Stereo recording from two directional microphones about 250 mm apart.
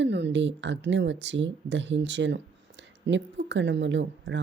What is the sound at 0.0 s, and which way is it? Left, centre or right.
Speech, right.